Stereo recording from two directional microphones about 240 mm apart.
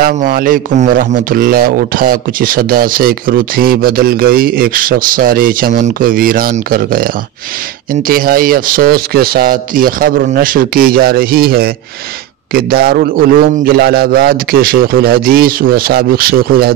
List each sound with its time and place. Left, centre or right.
0.0 s speech: right